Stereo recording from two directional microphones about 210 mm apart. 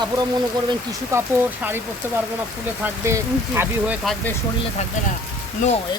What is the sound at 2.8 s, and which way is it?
Speech, 10° right (ahead or behind).